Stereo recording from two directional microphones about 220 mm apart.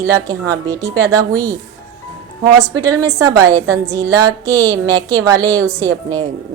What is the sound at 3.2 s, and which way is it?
Speech, 15° right (ahead or behind).